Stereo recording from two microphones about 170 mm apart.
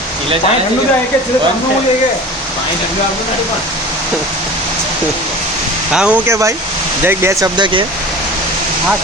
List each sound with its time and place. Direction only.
5.9 s speech: 5° right (ahead or behind); by 7.9 s 30° right (ahead or behind)